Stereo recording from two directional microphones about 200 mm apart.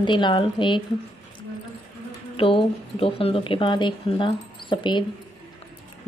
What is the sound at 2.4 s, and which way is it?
Speech, 25° left (ahead or behind).